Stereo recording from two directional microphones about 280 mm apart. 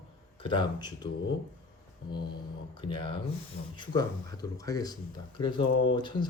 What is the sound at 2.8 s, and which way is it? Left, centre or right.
Speech, centre.